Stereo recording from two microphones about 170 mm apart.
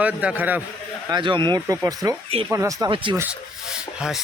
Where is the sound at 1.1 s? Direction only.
30° right (ahead or behind).